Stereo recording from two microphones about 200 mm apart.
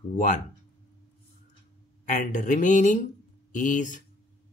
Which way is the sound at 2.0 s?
40° left (ahead or behind).